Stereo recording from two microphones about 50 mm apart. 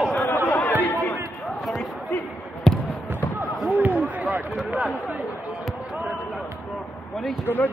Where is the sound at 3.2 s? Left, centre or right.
Left.